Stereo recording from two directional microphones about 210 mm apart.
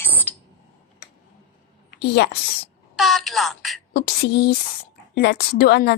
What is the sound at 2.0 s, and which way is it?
Speech, 55° left (ahead or behind).